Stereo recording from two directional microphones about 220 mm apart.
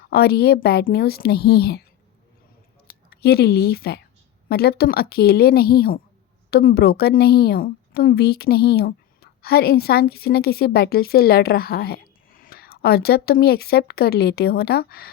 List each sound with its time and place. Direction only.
0.1 s a woman's voice: 45° left (ahead or behind)
2.8 s a woman's voice: 45° left (ahead or behind)